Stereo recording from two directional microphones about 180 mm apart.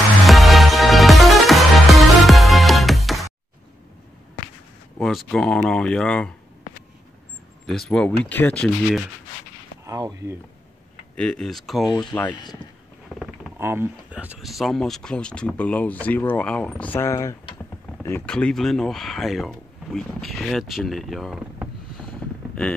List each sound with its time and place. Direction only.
0.3 s music: centre (ahead or behind)
4.9 s speech: centre (ahead or behind)
7.6 s speech: centre (ahead or behind)
9.8 s speech: 20° right (ahead or behind)
11.1 s speech: 5° left (ahead or behind)
13.2 s speech: 10° right (ahead or behind)
22.2 s a sound: 5° left (ahead or behind)